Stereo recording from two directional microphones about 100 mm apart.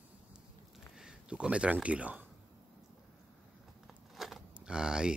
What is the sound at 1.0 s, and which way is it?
Speech, 10° right (ahead or behind).